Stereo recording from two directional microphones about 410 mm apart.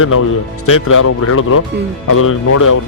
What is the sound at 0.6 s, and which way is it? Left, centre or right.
Speech, left.